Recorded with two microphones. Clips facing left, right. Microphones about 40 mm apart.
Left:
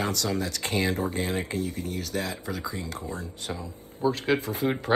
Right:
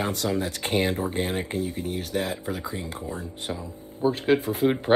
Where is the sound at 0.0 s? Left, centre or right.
Right.